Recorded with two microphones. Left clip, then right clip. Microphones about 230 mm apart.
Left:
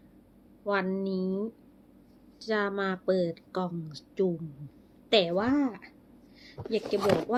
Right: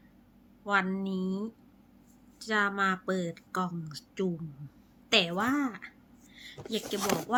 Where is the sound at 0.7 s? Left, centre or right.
Centre.